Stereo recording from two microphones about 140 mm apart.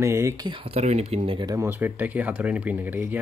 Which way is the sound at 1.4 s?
25° right (ahead or behind).